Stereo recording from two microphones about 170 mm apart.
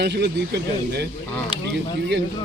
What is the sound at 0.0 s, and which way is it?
Speech, 80° right.